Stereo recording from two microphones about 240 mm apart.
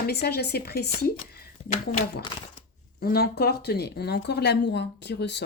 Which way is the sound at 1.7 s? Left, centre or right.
Left.